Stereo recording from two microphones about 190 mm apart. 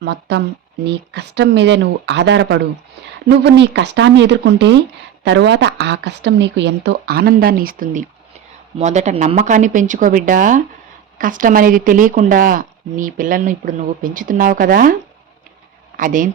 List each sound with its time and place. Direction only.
0.0 s speech: 65° right (ahead or behind); by 8.0 s 45° right (ahead or behind)
8.8 s speech: 35° right (ahead or behind)
16.0 s speech: 45° right (ahead or behind)